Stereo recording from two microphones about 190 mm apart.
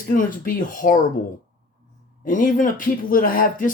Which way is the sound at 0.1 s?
45° left (ahead or behind).